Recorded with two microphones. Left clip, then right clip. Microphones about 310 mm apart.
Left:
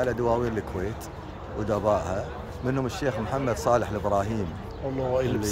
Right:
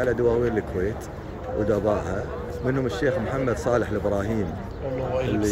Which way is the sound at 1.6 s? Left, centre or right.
Centre.